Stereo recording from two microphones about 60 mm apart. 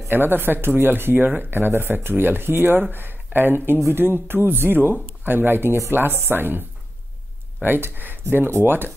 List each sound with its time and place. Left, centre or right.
0.1 s speech: right
7.6 s speech: right